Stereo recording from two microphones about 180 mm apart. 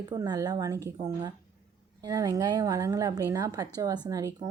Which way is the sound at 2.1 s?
20° right (ahead or behind).